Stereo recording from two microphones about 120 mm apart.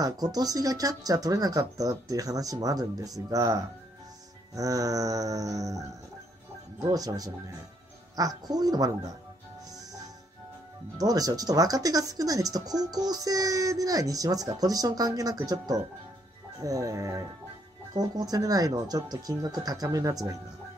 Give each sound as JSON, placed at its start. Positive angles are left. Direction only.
{"t": 0.0, "sound": "speech", "side_deg": -30}
{"t": 4.6, "sound": "music", "side_deg": -30}
{"t": 6.8, "sound": "speech", "side_deg": -30}
{"t": 11.0, "sound": "speech", "side_deg": -30}
{"t": 16.5, "sound": "music", "side_deg": -30}
{"t": 17.9, "sound": "speech", "side_deg": -30}